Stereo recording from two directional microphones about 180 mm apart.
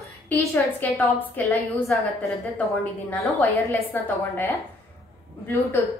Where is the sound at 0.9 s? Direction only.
15° left (ahead or behind).